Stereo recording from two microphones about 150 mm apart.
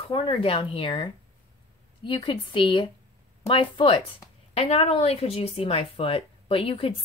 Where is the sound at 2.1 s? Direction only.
35° left (ahead or behind).